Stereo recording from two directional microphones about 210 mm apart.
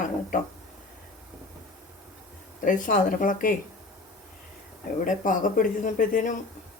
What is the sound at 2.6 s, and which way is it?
Speech, 40° left (ahead or behind).